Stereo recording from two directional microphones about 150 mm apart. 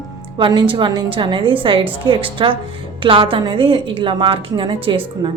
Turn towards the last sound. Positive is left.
turn(degrees=-35)  # may be behind; listen again after turning